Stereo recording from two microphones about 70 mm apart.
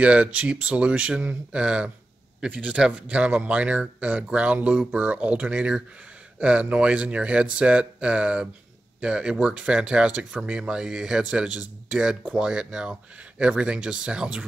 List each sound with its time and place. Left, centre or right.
0.0 s a man's voice: centre